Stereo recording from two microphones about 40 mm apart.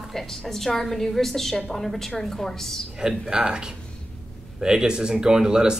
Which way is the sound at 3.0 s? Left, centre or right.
Centre.